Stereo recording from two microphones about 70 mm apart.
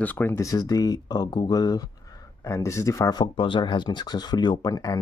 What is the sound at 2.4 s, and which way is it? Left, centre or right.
Speech, left.